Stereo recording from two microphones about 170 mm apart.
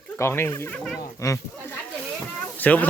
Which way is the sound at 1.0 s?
20° left (ahead or behind).